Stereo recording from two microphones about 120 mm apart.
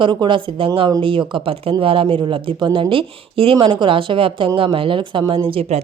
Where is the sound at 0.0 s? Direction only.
40° right (ahead or behind).